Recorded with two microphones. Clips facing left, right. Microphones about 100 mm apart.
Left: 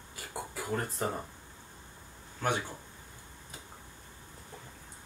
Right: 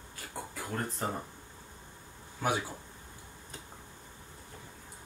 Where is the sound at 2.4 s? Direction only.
10° right (ahead or behind).